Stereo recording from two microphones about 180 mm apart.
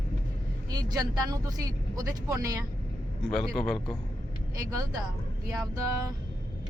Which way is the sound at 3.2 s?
5° left (ahead or behind).